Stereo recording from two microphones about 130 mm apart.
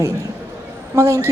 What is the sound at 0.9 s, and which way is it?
Speech, 20° right (ahead or behind).